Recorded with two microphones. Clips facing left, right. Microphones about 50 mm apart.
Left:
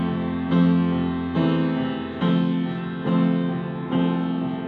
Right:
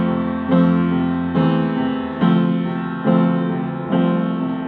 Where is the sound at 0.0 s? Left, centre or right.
Centre.